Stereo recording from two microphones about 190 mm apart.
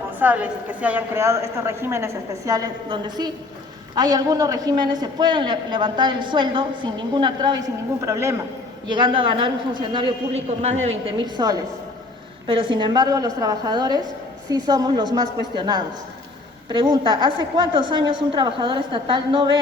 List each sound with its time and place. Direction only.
0.2 s a woman's voice: 10° right (ahead or behind)
8.9 s a man's voice: 25° right (ahead or behind)
11.2 s a man's voice: 20° right (ahead or behind)